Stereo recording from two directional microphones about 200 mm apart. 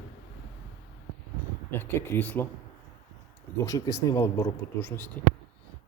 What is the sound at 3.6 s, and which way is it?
Speech, 15° left (ahead or behind).